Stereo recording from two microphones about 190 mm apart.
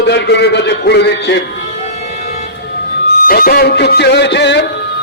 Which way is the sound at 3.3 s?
50° left (ahead or behind).